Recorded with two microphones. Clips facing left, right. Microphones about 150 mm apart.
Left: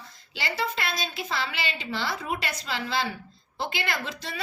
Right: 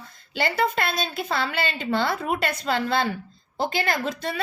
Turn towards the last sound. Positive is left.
turn(degrees=-50)  # may be behind; listen again after turning